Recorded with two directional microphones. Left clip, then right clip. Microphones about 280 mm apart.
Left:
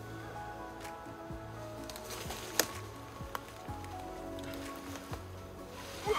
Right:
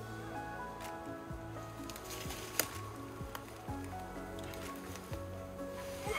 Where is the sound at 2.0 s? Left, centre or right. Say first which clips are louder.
Left 2 dB; centre.